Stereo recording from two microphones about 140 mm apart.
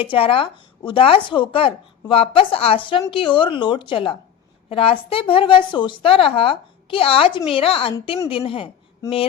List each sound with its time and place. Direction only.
0.0 s a woman's voice: 40° left (ahead or behind)